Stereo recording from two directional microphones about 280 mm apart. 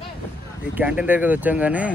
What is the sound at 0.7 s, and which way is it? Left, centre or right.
Speech, centre.